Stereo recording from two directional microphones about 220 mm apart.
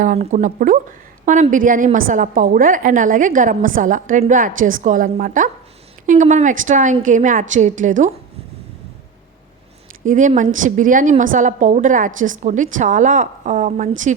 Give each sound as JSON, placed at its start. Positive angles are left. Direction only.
{"t": 0.0, "sound": "a woman's voice", "side_deg": -35}
{"t": 10.0, "sound": "a woman's voice", "side_deg": -35}